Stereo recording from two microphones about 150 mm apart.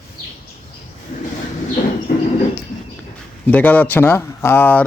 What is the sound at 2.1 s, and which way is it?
Cricket, 55° left (ahead or behind).